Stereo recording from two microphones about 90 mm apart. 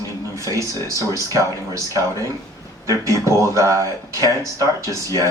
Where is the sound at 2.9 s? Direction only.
35° right (ahead or behind).